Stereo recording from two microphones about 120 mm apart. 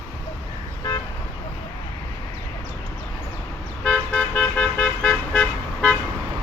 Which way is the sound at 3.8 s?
10° left (ahead or behind).